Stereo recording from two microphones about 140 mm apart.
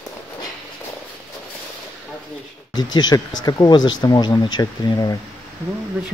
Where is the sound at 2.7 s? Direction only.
30° left (ahead or behind).